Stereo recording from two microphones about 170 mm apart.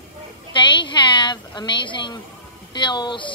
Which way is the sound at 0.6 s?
30° left (ahead or behind).